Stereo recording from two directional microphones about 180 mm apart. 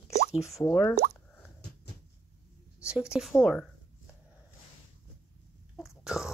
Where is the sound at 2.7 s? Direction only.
5° right (ahead or behind).